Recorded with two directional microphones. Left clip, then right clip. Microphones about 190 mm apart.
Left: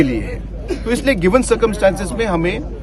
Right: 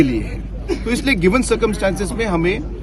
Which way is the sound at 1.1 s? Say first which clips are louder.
Left 1 dB; 10° left (ahead or behind).